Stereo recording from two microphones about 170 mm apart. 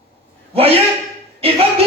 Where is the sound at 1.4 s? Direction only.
35° right (ahead or behind).